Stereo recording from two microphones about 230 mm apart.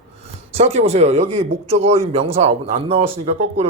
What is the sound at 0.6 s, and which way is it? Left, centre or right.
Speech, right.